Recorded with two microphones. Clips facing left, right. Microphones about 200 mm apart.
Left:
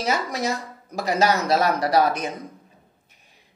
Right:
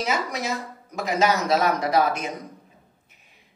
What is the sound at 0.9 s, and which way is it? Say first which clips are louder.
A man's voice: left 1 dB; 35° left (ahead or behind).